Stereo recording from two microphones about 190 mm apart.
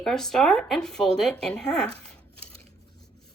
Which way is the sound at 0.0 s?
Centre (ahead or behind).